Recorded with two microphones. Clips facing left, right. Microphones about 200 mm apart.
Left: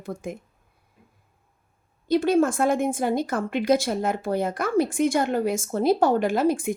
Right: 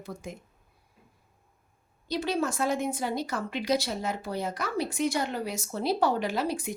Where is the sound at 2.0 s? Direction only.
50° left (ahead or behind).